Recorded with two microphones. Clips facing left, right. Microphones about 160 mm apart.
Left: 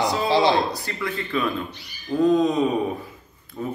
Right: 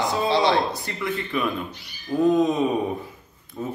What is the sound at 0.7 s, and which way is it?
A man's voice, 20° right (ahead or behind).